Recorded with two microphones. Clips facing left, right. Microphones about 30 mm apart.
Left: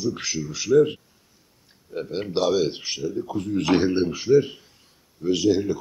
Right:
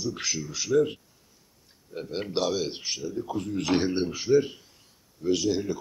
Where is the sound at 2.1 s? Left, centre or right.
Centre.